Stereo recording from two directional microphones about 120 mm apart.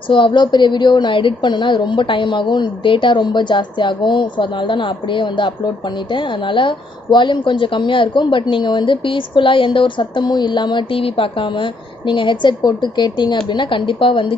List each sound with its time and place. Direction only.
0.1 s a woman's voice: 40° left (ahead or behind)